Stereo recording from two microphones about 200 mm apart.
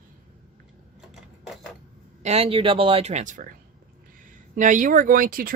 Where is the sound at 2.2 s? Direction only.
30° right (ahead or behind).